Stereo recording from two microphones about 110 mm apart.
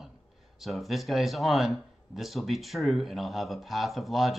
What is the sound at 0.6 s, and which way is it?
Speech, centre (ahead or behind).